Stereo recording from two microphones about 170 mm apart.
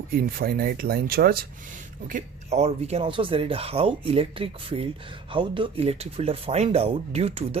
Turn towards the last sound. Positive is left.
turn(degrees=-35)  # may be behind; listen again after turning